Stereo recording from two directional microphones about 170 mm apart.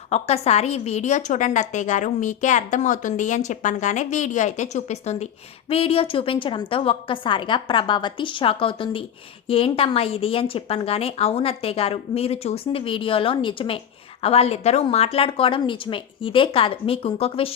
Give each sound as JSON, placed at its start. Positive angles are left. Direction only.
{"t": 0.1, "sound": "a woman's voice", "side_deg": 40}